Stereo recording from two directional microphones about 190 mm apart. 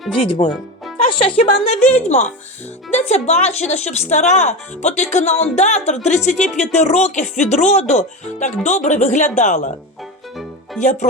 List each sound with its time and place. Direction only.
0.3 s speech: 30° left (ahead or behind)